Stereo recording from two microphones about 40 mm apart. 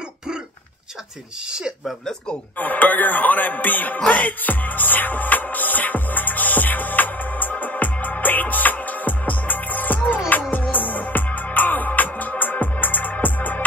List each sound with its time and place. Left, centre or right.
2.6 s music: left